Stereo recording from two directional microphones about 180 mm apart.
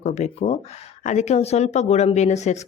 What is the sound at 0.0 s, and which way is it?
Speech, 40° left (ahead or behind).